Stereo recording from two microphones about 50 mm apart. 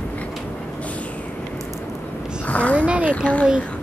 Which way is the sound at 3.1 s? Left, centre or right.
Left.